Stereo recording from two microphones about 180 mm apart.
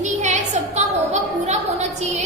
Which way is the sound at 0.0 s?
40° right (ahead or behind).